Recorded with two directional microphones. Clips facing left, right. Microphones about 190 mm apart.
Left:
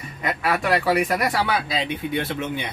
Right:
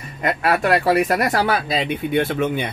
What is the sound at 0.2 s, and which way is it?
Speech, 50° right (ahead or behind).